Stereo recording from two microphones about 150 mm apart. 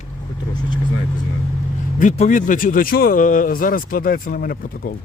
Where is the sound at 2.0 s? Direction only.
60° left (ahead or behind); by 4.9 s 75° left (ahead or behind).